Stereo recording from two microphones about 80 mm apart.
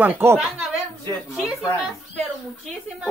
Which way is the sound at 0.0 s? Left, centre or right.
Right.